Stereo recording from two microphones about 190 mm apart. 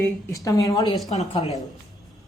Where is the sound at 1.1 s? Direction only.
35° left (ahead or behind).